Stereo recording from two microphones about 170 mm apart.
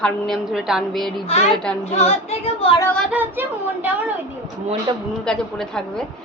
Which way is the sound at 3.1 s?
10° right (ahead or behind).